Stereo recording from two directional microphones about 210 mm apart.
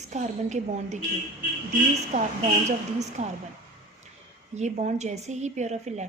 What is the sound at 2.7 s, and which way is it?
Speech, 35° right (ahead or behind).